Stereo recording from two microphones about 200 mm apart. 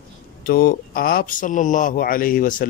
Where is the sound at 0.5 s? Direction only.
50° left (ahead or behind).